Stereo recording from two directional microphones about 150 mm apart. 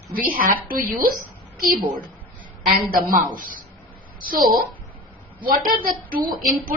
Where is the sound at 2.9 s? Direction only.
70° right (ahead or behind).